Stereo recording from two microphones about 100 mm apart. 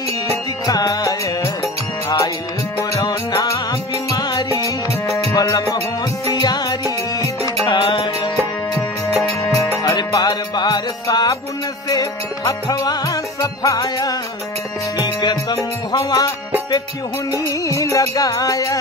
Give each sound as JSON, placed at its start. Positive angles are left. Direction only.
{"t": 0.7, "sound": "music", "side_deg": 40}
{"t": 7.8, "sound": "music", "side_deg": 60}
{"t": 9.4, "sound": "music", "side_deg": 35}
{"t": 15.0, "sound": "music", "side_deg": 50}
{"t": 15.9, "sound": "music", "side_deg": 40}
{"t": 17.5, "sound": "music", "side_deg": 30}